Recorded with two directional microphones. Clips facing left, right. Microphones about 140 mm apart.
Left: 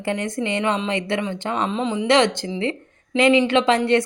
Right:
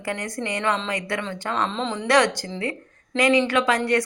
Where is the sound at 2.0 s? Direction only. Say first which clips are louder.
Left 1 dB; 20° left (ahead or behind).